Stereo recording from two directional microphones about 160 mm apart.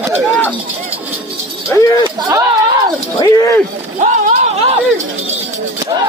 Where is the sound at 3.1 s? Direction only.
25° left (ahead or behind).